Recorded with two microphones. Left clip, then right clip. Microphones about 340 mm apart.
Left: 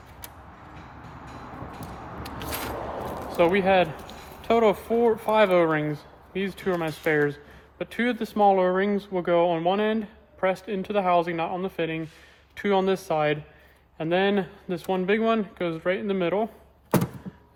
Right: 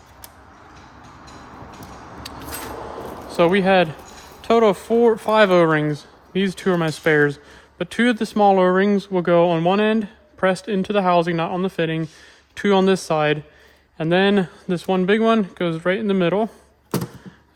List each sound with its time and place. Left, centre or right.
3.2 s speech: right